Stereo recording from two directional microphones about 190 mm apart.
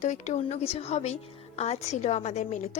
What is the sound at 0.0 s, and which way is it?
A woman's voice, 40° left (ahead or behind).